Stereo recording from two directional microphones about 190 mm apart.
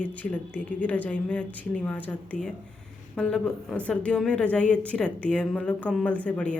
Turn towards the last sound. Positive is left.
turn(degrees=5)  # may be behind; listen again after turning